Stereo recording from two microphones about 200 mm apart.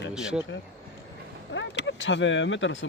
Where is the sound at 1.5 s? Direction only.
65° left (ahead or behind).